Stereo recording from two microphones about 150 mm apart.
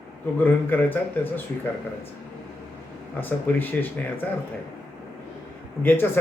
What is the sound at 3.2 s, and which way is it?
Speech, 10° left (ahead or behind).